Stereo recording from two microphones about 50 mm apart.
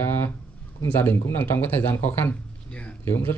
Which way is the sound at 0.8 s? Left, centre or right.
Left.